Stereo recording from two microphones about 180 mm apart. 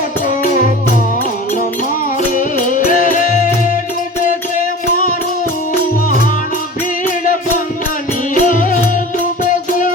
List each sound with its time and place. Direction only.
2.3 s music: 45° left (ahead or behind)
8.4 s music: 45° left (ahead or behind)